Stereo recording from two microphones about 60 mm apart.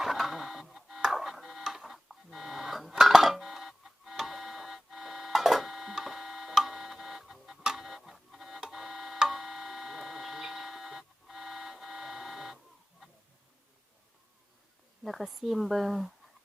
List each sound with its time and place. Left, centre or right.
0.0 s printer: centre
2.9 s a sound: centre
15.0 s speech: centre